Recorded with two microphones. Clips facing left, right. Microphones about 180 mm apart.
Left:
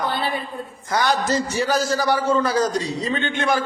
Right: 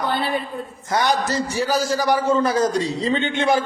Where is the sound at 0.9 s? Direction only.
25° right (ahead or behind).